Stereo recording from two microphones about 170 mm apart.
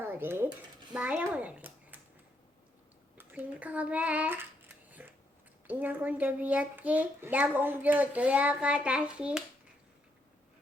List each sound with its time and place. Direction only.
0.0 s a child's voice: 10° right (ahead or behind)
3.2 s child singing: 10° right (ahead or behind)
5.6 s a child's voice: 10° right (ahead or behind)